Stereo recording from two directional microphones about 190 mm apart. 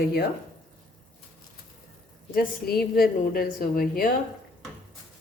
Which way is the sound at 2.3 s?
50° left (ahead or behind).